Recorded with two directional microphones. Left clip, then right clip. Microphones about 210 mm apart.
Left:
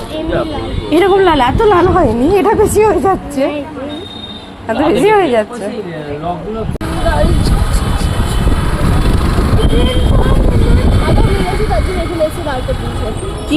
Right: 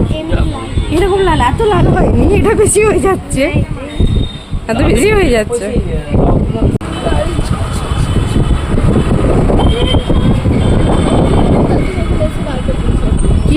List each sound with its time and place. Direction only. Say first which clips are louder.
0.9 s a woman's voice: left 2 dB; 20° left (ahead or behind)
2.0 s a woman's voice: left 2 dB; 20° right (ahead or behind)
4.8 s a woman's voice: left 1 dB; 30° right (ahead or behind)